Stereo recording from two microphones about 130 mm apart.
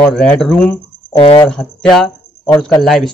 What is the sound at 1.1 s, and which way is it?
Speech, 45° left (ahead or behind).